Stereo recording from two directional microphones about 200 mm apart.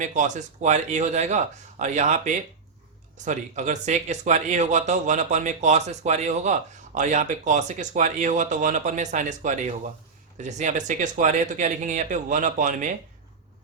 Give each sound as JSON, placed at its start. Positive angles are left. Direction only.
{"t": 0.0, "sound": "speech", "side_deg": -40}